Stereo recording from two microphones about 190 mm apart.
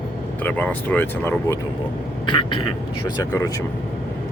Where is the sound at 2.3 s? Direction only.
25° left (ahead or behind).